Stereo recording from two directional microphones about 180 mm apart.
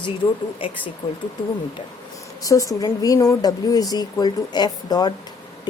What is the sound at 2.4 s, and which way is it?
Speech, 20° left (ahead or behind).